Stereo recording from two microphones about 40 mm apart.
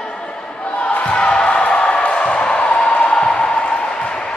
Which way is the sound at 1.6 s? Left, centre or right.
Left.